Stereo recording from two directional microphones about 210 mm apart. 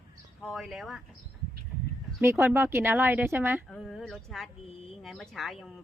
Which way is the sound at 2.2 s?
10° right (ahead or behind).